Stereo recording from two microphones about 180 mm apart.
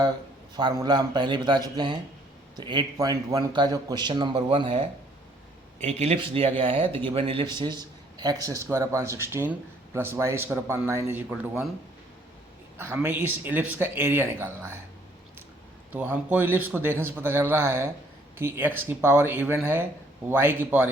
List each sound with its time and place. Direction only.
0.5 s a man's voice: 25° right (ahead or behind)
5.8 s speech: 35° right (ahead or behind); by 11.3 s 10° right (ahead or behind)
12.7 s speech: 15° right (ahead or behind)
15.9 s speech: 10° right (ahead or behind)